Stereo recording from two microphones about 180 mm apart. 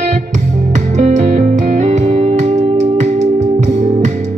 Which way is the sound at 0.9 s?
40° right (ahead or behind).